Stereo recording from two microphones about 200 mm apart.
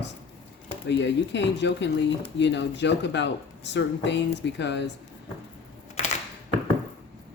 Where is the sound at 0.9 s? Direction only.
60° left (ahead or behind).